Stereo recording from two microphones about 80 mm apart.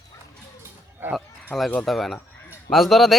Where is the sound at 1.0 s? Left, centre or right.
Right.